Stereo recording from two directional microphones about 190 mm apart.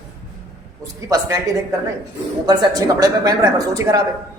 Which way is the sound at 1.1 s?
20° right (ahead or behind).